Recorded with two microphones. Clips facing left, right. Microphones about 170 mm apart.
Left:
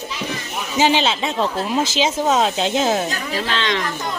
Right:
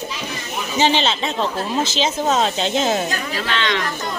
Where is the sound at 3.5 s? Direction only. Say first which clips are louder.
Right 1 dB; 30° left (ahead or behind).